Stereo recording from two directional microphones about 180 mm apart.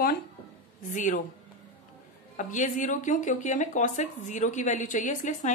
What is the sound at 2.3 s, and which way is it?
A woman's voice, 45° left (ahead or behind).